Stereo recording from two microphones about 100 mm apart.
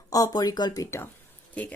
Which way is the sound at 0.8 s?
25° left (ahead or behind).